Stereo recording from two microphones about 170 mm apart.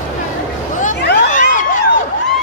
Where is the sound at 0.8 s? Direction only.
50° left (ahead or behind).